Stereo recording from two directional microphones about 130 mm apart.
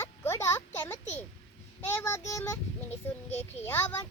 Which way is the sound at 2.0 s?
20° left (ahead or behind).